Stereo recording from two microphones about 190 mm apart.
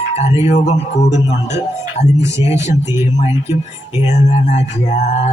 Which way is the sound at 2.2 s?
15° right (ahead or behind).